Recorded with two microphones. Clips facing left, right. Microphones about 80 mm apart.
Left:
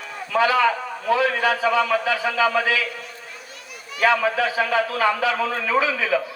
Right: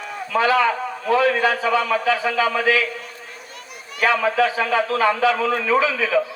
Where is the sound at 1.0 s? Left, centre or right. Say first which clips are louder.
Right 2 dB; right.